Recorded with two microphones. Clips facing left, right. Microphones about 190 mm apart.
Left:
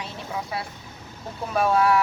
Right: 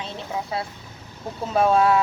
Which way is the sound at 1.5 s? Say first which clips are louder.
Right 2 dB; 25° right (ahead or behind).